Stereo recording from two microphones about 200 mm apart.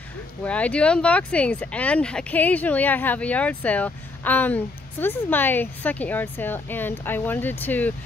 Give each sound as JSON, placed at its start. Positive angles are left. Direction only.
{"t": 0.4, "sound": "speech", "side_deg": 5}